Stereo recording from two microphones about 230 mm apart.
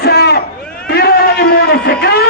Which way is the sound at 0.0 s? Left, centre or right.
Left.